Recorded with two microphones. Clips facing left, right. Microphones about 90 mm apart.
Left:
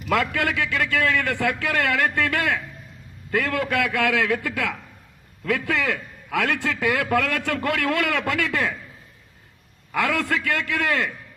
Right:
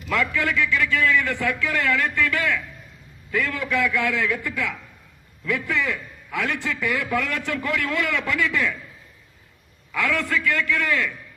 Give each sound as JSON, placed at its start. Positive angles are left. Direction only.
{"t": 0.1, "sound": "a man's voice", "side_deg": 70}
{"t": 5.5, "sound": "a man's voice", "side_deg": 85}
{"t": 9.9, "sound": "a man's voice", "side_deg": 65}